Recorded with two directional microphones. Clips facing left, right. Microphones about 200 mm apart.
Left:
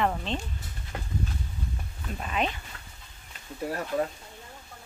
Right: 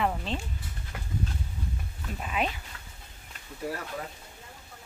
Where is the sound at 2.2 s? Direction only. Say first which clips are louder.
Left 1 dB; 5° right (ahead or behind).